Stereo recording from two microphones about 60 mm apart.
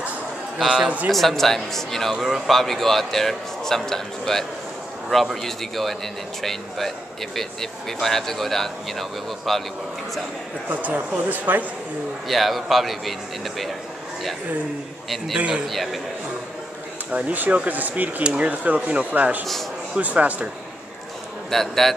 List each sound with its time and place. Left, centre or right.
0.6 s a man's voice: centre
0.8 s speech: right
1.1 s a man's voice: centre
2.1 s a man's voice: centre
10.7 s speech: right
12.3 s a man's voice: centre
15.3 s a man's voice: centre
15.6 s a man's voice: centre
17.1 s speech: right
21.5 s a man's voice: centre